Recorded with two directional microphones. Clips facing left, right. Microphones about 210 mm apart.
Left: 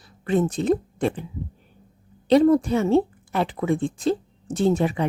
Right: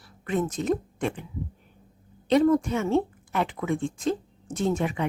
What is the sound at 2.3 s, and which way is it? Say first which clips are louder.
A woman's voice: left 4 dB; 35° left (ahead or behind).